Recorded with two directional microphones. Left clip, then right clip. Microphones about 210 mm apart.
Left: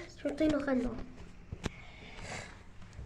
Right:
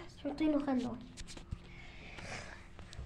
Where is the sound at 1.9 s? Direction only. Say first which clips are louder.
Left 2 dB; 10° left (ahead or behind).